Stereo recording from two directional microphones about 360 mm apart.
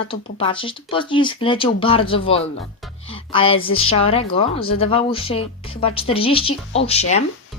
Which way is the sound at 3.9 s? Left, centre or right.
Centre.